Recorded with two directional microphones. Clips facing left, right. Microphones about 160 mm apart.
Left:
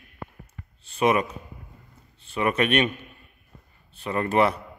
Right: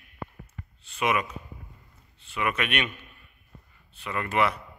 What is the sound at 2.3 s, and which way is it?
Speech, 35° left (ahead or behind).